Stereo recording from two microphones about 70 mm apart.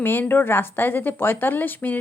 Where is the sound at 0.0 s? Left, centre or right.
Left.